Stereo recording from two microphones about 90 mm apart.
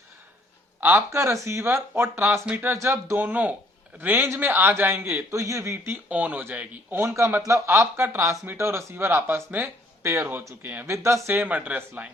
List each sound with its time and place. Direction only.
0.8 s a man's voice: 25° right (ahead or behind)
2.7 s a man's voice: 30° right (ahead or behind)
10.9 s a man's voice: 30° right (ahead or behind)